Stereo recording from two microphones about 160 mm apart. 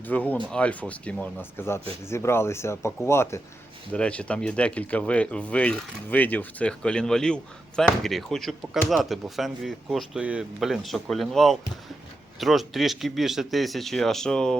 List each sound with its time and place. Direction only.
0.0 s speech: 10° left (ahead or behind)